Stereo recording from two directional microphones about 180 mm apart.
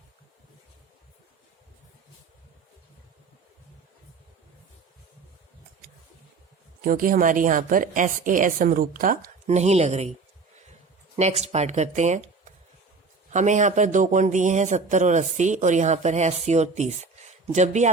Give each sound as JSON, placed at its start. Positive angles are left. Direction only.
{"t": 6.8, "sound": "a woman's voice", "side_deg": -50}
{"t": 11.2, "sound": "speech", "side_deg": -35}
{"t": 13.3, "sound": "speech", "side_deg": -40}